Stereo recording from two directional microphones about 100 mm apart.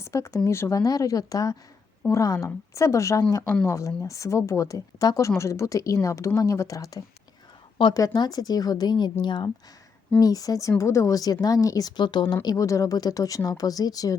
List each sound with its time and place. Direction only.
0.0 s a woman's voice: 30° left (ahead or behind); by 9.5 s 50° left (ahead or behind)
10.2 s speech: 40° left (ahead or behind)